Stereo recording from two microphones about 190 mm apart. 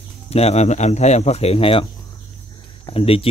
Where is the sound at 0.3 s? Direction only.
35° left (ahead or behind).